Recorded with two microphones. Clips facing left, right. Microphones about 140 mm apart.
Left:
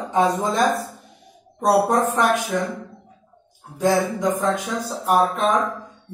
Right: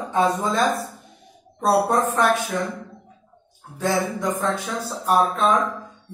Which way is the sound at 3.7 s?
15° left (ahead or behind).